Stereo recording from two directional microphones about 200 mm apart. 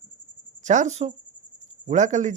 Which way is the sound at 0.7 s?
35° right (ahead or behind).